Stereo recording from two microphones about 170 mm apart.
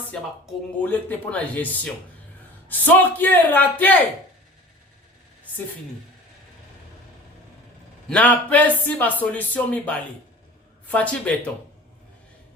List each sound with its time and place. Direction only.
0.1 s speech: 5° left (ahead or behind)
8.1 s speech: 10° left (ahead or behind)